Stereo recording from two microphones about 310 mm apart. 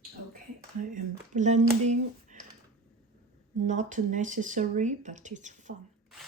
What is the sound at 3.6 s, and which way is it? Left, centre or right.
Speech, right.